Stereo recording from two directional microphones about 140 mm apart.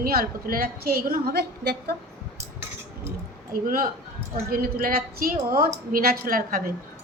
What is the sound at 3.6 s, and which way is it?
A woman's voice, 85° right.